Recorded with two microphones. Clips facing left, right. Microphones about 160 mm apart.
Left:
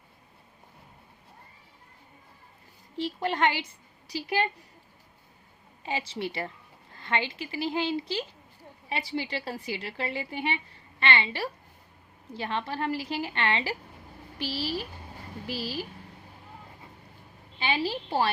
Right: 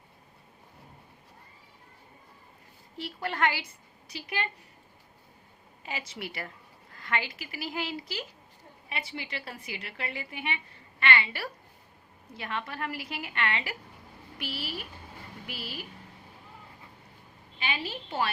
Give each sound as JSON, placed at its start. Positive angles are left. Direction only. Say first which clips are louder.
{"t": 3.0, "sound": "a woman's voice", "louder": "left 3 dB", "side_deg": 25}
{"t": 4.1, "sound": "a woman's voice", "louder": "left 7 dB", "side_deg": 35}
{"t": 5.8, "sound": "a woman's voice", "louder": "left 6 dB", "side_deg": 30}
{"t": 17.6, "sound": "a woman's voice", "louder": "left 6 dB", "side_deg": 30}